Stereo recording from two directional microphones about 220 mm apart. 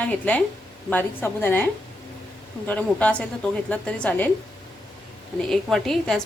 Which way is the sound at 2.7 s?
5° left (ahead or behind).